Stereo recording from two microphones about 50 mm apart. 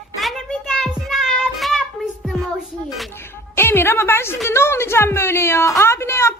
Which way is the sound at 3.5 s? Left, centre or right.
Left.